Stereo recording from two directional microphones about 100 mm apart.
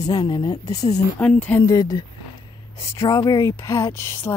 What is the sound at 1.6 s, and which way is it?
Speech, 40° left (ahead or behind).